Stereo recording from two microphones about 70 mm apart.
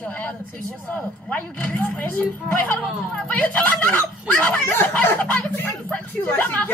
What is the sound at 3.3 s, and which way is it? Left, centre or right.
Speech, left.